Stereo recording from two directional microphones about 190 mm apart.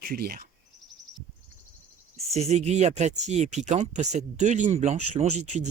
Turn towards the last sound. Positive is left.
turn(degrees=-40)  # may be behind; listen again after turning